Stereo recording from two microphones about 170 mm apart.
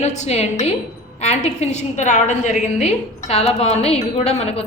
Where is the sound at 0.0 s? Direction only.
40° left (ahead or behind).